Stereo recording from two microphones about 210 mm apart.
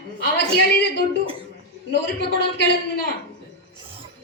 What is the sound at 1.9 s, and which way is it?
Speech, 55° left (ahead or behind).